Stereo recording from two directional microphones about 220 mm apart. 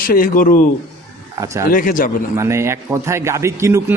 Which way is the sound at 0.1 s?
40° left (ahead or behind).